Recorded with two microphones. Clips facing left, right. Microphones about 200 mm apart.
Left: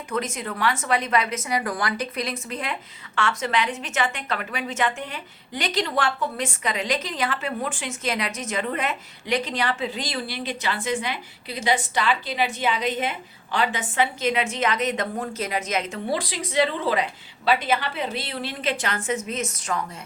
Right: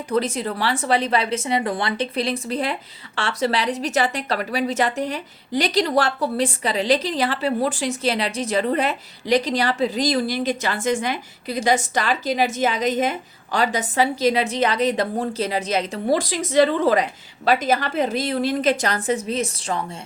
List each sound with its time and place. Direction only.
0.1 s a woman's voice: 35° right (ahead or behind)